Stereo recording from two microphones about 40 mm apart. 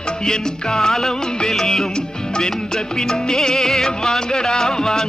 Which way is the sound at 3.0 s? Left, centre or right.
Centre.